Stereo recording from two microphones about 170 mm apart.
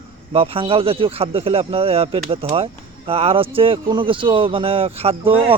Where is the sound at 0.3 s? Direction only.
30° right (ahead or behind).